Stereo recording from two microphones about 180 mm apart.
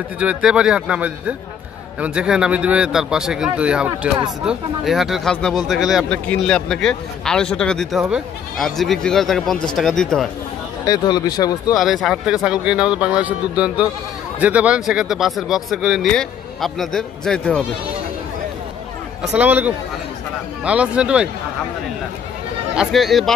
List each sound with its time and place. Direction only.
0.2 s speech: 5° right (ahead or behind)
10.9 s speech: 20° left (ahead or behind)
11.7 s speech: centre (ahead or behind)
19.3 s speech: 10° right (ahead or behind)
22.8 s speech: centre (ahead or behind)